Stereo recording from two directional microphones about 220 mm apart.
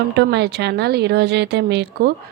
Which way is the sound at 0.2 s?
50° right (ahead or behind).